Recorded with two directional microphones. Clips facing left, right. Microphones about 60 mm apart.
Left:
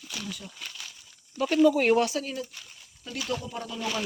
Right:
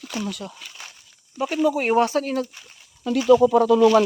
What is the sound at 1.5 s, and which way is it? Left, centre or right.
Speech, centre.